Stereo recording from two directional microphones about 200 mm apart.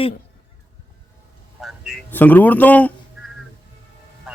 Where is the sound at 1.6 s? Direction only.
Centre (ahead or behind).